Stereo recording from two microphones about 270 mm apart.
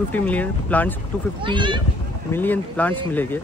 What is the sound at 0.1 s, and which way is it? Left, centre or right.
Speech, centre.